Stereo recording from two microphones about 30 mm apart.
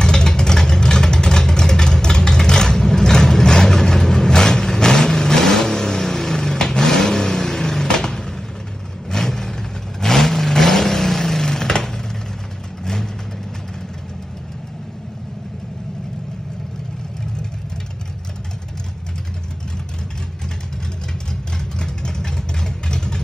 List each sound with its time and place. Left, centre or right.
0.0 s vehicle: left
21.5 s vehicle: left